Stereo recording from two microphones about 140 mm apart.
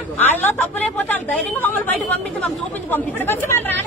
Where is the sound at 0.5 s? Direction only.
15° left (ahead or behind).